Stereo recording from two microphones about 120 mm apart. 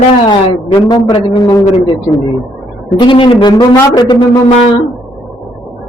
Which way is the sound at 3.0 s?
45° left (ahead or behind).